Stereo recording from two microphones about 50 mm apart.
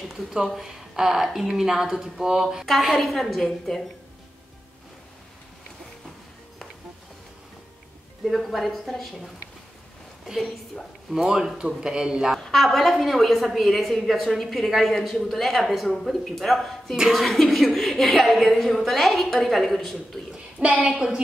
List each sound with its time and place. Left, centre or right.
0.1 s a woman's voice: centre
8.4 s a woman's voice: centre
10.3 s speech: centre
12.4 s a woman's voice: centre
20.6 s a woman's voice: right